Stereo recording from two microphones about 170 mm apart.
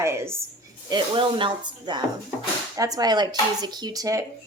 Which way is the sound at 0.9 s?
25° right (ahead or behind).